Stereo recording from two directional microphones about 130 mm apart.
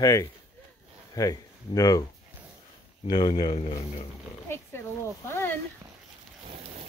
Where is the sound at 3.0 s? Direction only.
35° left (ahead or behind).